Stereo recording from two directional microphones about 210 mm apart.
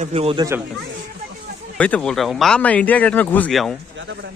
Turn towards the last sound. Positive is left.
turn(degrees=0)  # may be behind; listen again after turning